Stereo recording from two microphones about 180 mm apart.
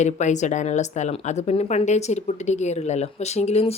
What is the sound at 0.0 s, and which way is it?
Speech, 40° left (ahead or behind).